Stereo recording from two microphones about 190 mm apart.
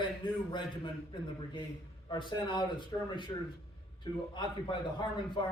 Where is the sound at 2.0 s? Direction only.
25° left (ahead or behind).